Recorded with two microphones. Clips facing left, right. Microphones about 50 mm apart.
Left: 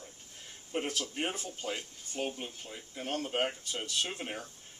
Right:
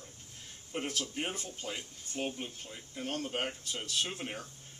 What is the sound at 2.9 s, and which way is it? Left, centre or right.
Speech, left.